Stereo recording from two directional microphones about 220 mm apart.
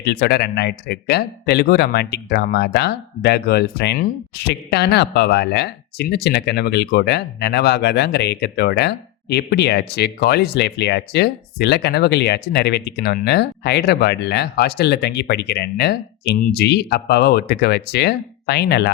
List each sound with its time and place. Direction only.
0.0 s speech: 50° left (ahead or behind)